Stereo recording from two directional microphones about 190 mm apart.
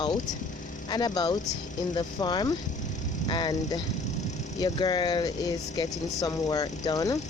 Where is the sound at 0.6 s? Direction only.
45° left (ahead or behind).